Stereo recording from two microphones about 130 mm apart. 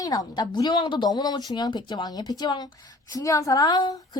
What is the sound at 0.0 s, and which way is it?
Speech, 30° left (ahead or behind).